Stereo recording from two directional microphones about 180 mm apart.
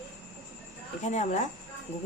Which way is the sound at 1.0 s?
40° left (ahead or behind).